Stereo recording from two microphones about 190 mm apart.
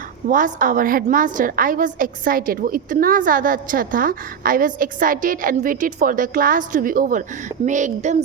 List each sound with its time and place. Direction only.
0.3 s a woman's voice: 45° right (ahead or behind)